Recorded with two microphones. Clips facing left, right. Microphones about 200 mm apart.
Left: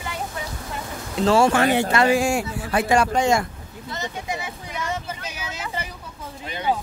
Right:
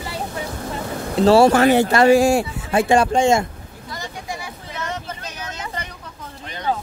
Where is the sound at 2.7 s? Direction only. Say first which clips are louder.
Right 4 dB; 25° right (ahead or behind).